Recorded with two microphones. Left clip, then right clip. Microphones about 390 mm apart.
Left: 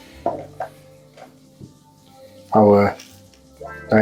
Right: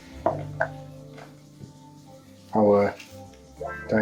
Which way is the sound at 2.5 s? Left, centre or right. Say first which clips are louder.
Left 6 dB; left.